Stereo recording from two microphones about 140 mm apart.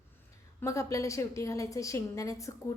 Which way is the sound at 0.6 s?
20° left (ahead or behind).